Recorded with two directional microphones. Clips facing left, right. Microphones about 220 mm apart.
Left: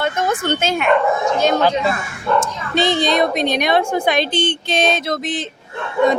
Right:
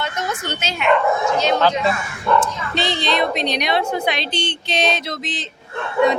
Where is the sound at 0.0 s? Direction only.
50° left (ahead or behind).